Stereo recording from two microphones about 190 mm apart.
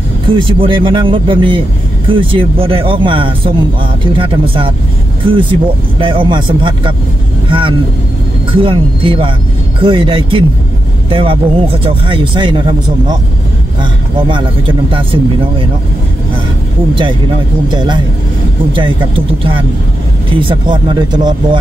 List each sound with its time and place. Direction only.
0.3 s speech: 25° right (ahead or behind)
17.6 s speech: 25° right (ahead or behind)